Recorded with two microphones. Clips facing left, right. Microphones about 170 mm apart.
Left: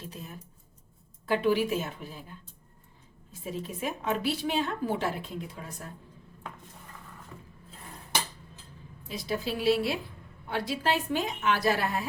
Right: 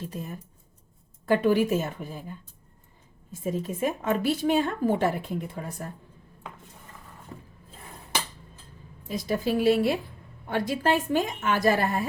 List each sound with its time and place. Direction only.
1.3 s speech: 50° right (ahead or behind)
3.4 s speech: 45° right (ahead or behind)
7.3 s a sound: 30° right (ahead or behind)
9.0 s speech: 45° right (ahead or behind)